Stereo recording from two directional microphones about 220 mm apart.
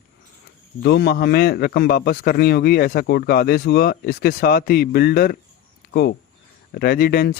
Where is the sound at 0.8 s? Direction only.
50° left (ahead or behind).